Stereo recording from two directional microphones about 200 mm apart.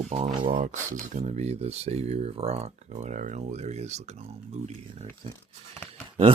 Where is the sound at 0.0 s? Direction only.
35° right (ahead or behind).